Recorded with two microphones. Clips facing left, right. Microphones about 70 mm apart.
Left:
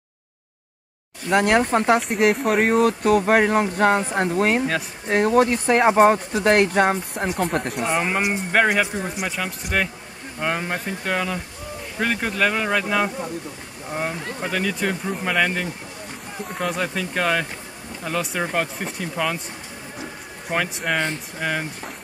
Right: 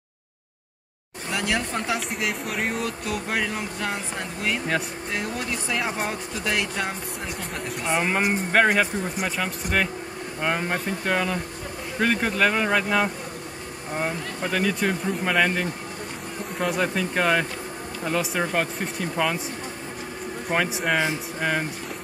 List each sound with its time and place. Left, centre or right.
1.3 s speech: left
7.9 s speech: centre
14.5 s speech: centre
20.4 s speech: centre